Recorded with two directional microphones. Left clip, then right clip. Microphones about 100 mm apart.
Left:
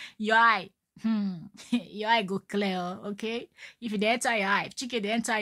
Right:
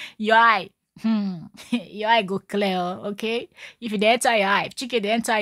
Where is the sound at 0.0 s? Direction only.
30° right (ahead or behind).